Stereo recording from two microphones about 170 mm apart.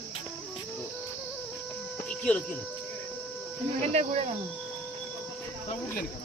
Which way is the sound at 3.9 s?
40° right (ahead or behind).